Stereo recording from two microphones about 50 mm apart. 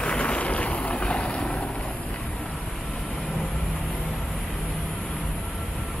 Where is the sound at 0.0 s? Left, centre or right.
Left.